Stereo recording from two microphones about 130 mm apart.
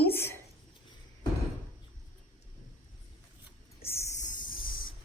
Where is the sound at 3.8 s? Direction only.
20° left (ahead or behind).